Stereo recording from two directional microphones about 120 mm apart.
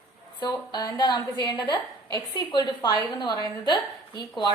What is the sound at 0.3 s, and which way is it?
A woman's voice, 35° left (ahead or behind).